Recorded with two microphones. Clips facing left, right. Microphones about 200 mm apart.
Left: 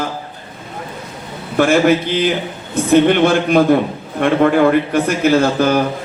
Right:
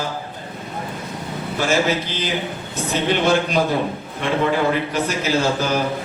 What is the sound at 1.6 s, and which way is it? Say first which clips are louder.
A man's voice: left 8 dB; 55° left (ahead or behind).